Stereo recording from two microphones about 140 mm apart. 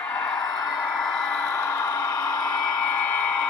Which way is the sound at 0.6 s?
Centre (ahead or behind).